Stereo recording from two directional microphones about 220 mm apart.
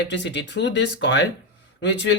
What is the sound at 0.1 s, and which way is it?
A man's voice, 55° left (ahead or behind).